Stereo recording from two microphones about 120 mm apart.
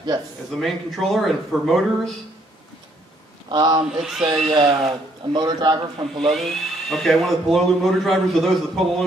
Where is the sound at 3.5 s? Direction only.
35° right (ahead or behind).